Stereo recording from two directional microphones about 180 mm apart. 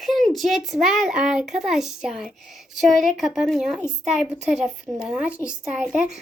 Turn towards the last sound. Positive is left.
turn(degrees=-5)  # may be behind; listen again after turning